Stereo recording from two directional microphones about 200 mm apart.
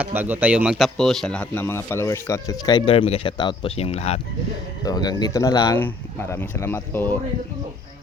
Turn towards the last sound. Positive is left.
turn(degrees=10)  # may be behind; listen again after turning